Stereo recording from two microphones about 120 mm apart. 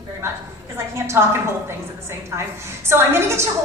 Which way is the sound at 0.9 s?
25° right (ahead or behind).